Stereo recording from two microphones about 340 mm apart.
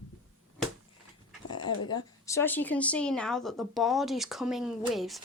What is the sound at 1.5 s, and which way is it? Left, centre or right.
Speech, centre.